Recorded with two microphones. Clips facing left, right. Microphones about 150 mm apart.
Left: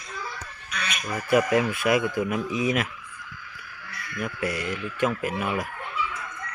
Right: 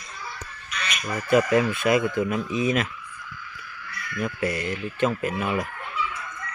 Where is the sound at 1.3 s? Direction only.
10° left (ahead or behind).